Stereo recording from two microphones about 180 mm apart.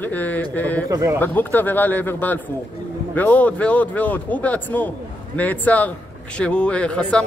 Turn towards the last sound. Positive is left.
turn(degrees=5)  # may be behind; listen again after turning